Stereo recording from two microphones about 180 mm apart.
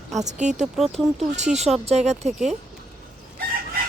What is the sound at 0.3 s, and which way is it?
Speech, 40° right (ahead or behind).